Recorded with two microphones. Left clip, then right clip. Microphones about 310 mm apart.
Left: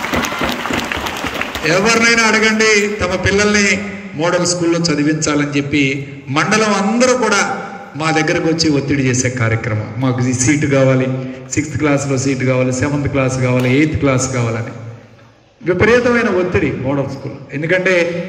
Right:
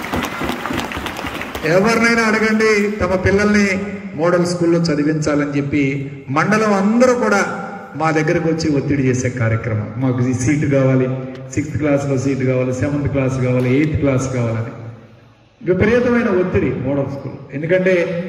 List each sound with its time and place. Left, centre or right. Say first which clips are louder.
1.6 s a man's voice: left 1 dB; centre
15.6 s a man's voice: left 3 dB; centre